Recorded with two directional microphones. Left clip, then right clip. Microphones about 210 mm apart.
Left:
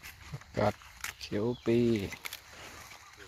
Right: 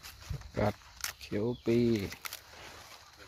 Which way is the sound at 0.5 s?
5° right (ahead or behind).